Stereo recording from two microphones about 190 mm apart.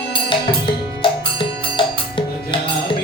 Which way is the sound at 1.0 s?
25° left (ahead or behind).